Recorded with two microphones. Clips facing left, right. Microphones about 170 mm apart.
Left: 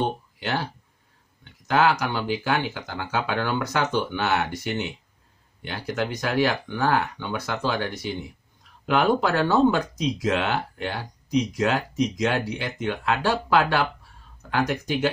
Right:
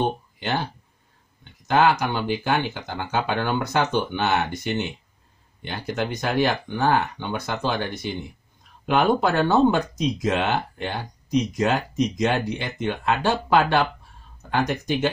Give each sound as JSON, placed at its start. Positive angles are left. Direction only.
{"t": 0.4, "sound": "speech", "side_deg": -20}
{"t": 1.7, "sound": "speech", "side_deg": -20}